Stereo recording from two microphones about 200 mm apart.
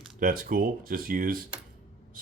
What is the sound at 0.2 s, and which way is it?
Speech, 45° right (ahead or behind).